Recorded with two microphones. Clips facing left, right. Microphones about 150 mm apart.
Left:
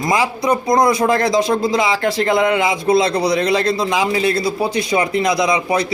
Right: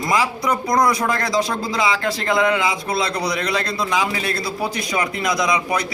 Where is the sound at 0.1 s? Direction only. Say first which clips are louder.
Left 3 dB; 25° left (ahead or behind).